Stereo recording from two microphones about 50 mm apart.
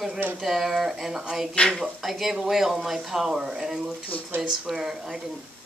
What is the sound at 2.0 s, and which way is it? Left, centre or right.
Speech, centre.